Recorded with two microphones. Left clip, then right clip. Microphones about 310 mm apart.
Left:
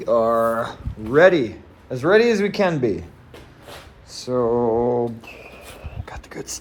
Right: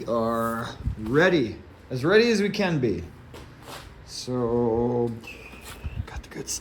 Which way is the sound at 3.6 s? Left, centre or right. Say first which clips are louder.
Left 1 dB; centre.